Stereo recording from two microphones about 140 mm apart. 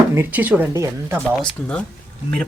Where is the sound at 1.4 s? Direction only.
5° left (ahead or behind).